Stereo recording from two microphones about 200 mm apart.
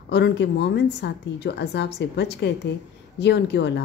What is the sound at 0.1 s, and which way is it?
Speech, 60° left (ahead or behind).